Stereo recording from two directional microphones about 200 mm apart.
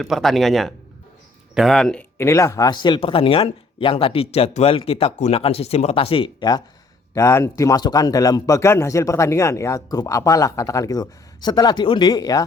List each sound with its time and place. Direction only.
0.0 s a man's voice: centre (ahead or behind); by 12.4 s 20° left (ahead or behind)